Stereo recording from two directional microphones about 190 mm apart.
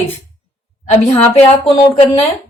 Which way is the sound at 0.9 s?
30° left (ahead or behind).